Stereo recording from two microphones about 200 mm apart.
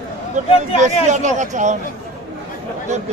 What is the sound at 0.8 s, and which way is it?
Speech, 35° right (ahead or behind).